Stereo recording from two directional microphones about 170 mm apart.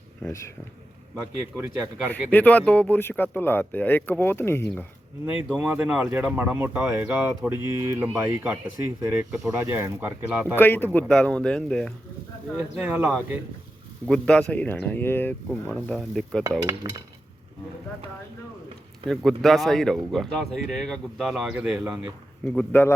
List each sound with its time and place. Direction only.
1.2 s speech: 15° right (ahead or behind)
2.3 s speech: 10° left (ahead or behind)
5.5 s speech: 10° right (ahead or behind)
10.6 s speech: 10° left (ahead or behind)
12.7 s speech: 10° right (ahead or behind)
14.1 s speech: 5° left (ahead or behind)
16.4 s cutlery: 20° right (ahead or behind)
19.0 s speech: 5° left (ahead or behind)
22.4 s speech: 10° left (ahead or behind)